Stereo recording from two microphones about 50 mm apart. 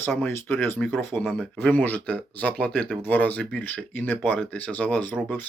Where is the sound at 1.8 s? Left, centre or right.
Left.